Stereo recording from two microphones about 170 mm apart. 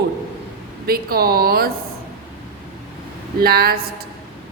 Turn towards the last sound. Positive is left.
turn(degrees=-65)  # may be behind; listen again after turning